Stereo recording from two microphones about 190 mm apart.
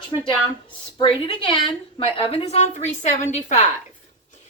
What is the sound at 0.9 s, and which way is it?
A woman's voice, 25° left (ahead or behind).